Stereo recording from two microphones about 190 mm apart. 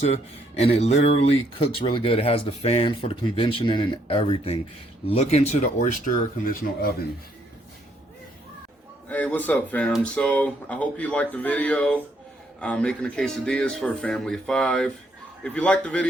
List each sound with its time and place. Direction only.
0.0 s speech: 35° left (ahead or behind); by 7.1 s 50° left (ahead or behind)
9.0 s speech: 10° left (ahead or behind)